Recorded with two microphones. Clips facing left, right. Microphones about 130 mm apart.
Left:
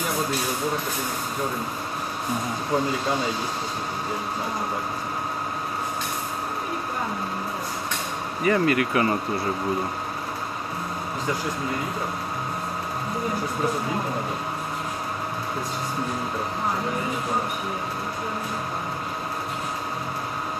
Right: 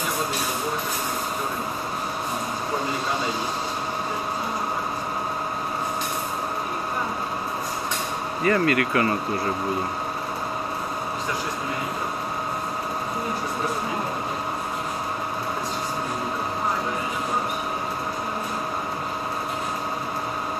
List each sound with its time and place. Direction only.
8.4 s speech: 15° left (ahead or behind)